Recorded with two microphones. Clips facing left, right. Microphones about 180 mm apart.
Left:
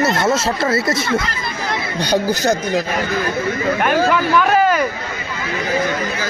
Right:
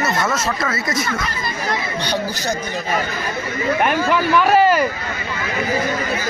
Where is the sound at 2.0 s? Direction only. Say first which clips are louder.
Left 6 dB; 45° left (ahead or behind).